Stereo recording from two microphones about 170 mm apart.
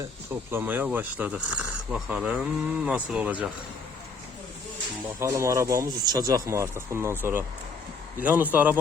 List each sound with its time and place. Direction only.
0.5 s speech: 10° right (ahead or behind)
5.0 s speech: 15° right (ahead or behind)